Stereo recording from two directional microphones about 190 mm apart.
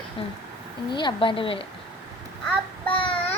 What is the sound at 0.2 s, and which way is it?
A woman's voice, 30° left (ahead or behind).